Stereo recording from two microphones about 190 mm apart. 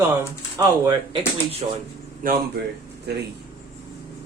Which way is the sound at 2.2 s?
45° right (ahead or behind).